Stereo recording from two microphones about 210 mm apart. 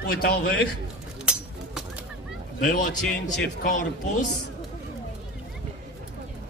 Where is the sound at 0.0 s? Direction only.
45° left (ahead or behind).